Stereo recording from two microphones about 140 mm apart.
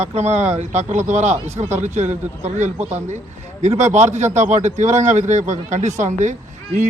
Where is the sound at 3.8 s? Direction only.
55° right (ahead or behind).